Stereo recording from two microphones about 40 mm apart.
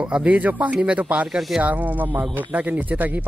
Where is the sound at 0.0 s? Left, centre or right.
Right.